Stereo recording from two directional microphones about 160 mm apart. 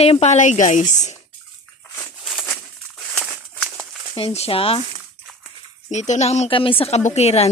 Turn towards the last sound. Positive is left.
turn(degrees=40)  # may be behind; listen again after turning